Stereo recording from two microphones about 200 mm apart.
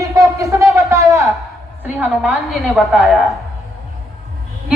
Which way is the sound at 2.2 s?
Centre (ahead or behind).